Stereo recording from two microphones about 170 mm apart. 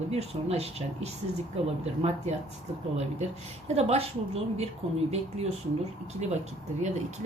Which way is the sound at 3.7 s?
40° right (ahead or behind).